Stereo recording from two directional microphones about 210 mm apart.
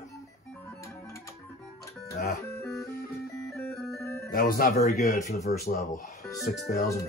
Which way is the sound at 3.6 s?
Centre (ahead or behind).